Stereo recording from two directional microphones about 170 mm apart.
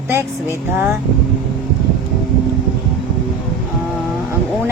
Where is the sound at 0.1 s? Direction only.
10° right (ahead or behind).